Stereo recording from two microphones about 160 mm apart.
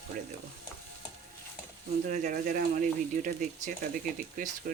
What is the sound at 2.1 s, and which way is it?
Speech, 55° right (ahead or behind).